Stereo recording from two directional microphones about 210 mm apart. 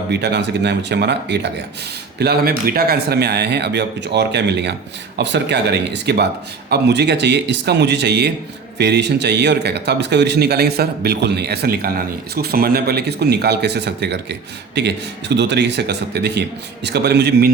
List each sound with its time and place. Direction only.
0.1 s a man's voice: 55° right (ahead or behind)